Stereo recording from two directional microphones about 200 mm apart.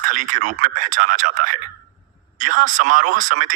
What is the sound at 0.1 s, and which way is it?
Speech, 40° right (ahead or behind).